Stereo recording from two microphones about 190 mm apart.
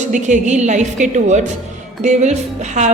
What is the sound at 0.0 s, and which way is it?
A woman's voice, 40° right (ahead or behind).